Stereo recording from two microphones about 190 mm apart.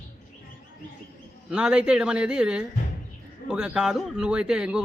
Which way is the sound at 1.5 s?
5° right (ahead or behind).